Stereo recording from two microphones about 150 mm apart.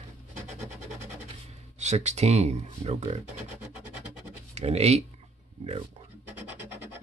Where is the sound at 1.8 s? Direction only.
50° right (ahead or behind).